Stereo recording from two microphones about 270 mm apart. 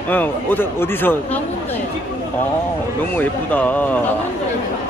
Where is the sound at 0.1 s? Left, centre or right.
Centre.